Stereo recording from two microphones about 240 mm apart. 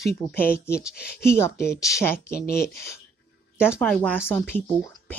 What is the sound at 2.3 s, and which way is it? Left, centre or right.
Speech, left.